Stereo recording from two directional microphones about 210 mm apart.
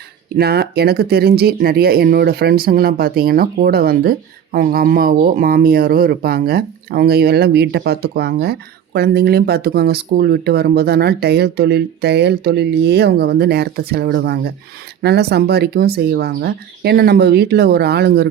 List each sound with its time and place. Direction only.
0.3 s speech: 50° right (ahead or behind)